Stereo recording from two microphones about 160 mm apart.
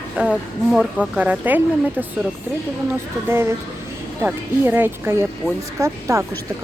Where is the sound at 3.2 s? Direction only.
15° right (ahead or behind).